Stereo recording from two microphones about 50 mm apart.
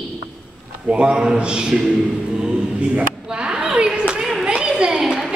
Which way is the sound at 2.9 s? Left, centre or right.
Centre.